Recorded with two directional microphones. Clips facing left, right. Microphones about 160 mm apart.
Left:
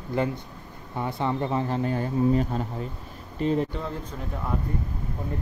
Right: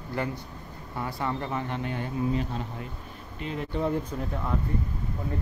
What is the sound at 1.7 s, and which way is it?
Speech, 35° left (ahead or behind).